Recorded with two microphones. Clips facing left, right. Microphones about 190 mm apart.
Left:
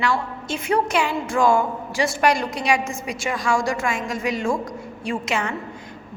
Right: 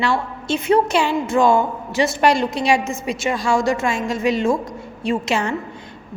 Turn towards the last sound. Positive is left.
turn(degrees=-30)  # may be behind; listen again after turning